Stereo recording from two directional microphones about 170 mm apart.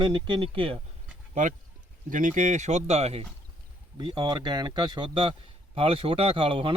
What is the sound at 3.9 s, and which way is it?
Speech, 25° right (ahead or behind).